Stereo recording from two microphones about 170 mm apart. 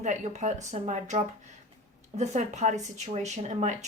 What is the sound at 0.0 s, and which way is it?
Speech, 45° right (ahead or behind).